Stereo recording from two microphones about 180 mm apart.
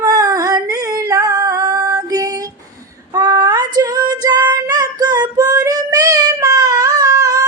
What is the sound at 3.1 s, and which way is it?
Female singing, 20° right (ahead or behind).